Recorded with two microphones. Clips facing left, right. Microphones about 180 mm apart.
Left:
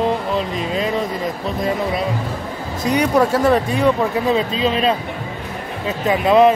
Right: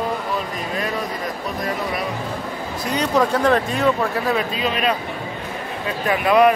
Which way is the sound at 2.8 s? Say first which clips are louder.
Left 4 dB; 15° left (ahead or behind).